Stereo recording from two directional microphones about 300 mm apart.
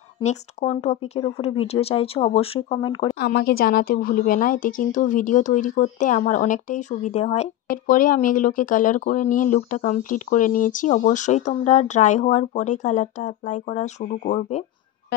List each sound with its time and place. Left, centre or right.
0.2 s a woman's voice: left
3.2 s a woman's voice: left